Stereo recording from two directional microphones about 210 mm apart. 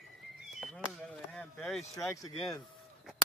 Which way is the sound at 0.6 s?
5° left (ahead or behind).